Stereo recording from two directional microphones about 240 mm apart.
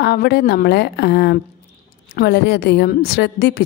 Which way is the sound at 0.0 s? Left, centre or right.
Left.